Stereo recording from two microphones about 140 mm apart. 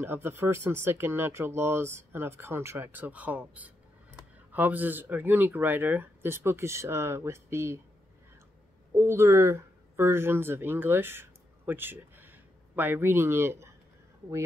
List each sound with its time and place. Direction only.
0.0 s speech: 15° right (ahead or behind)
8.9 s speech: 20° right (ahead or behind)